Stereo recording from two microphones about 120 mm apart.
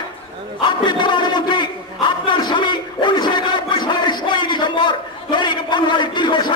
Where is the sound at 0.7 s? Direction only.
40° left (ahead or behind).